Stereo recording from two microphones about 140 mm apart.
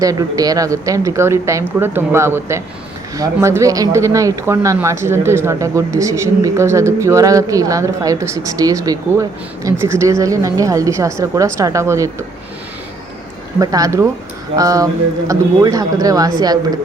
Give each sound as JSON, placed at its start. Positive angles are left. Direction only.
{"t": 0.0, "sound": "speech", "side_deg": -25}
{"t": 13.6, "sound": "speech", "side_deg": -25}